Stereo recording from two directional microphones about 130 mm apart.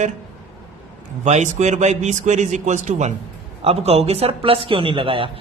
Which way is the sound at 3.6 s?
50° right (ahead or behind).